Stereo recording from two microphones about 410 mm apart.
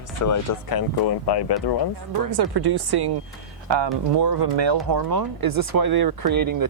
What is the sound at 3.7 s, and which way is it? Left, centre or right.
Speech, right.